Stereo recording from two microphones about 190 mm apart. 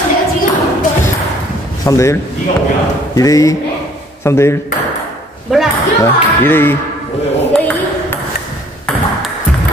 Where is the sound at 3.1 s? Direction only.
15° left (ahead or behind).